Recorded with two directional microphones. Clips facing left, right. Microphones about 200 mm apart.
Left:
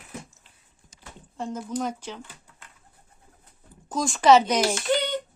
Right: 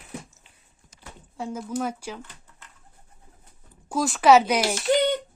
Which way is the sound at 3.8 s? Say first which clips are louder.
Even; 5° right (ahead or behind).